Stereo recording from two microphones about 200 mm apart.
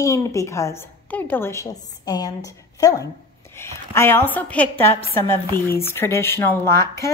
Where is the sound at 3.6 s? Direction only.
10° left (ahead or behind).